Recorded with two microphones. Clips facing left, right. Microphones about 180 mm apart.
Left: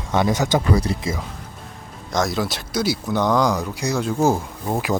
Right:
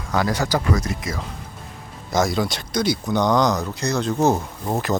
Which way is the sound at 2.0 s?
Centre (ahead or behind).